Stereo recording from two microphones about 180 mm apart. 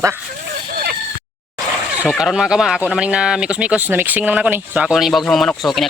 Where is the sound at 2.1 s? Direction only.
Centre (ahead or behind).